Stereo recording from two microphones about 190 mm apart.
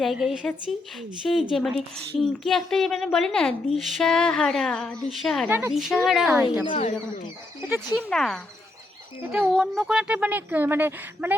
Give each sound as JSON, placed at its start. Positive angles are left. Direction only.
{"t": 0.0, "sound": "a woman's voice", "side_deg": 0}
{"t": 6.7, "sound": "speech", "side_deg": 40}
{"t": 7.7, "sound": "a woman's voice", "side_deg": 5}